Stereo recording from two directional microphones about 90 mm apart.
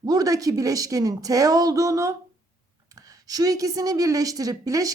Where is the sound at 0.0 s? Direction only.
45° right (ahead or behind).